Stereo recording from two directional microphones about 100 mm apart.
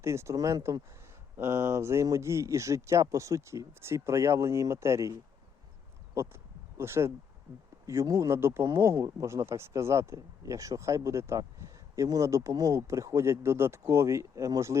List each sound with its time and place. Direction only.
0.0 s speech: 30° right (ahead or behind)
6.1 s a sound: 25° right (ahead or behind)
7.5 s speech: 30° right (ahead or behind)